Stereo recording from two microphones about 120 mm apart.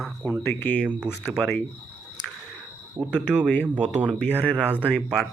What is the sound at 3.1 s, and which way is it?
Speech, 10° right (ahead or behind).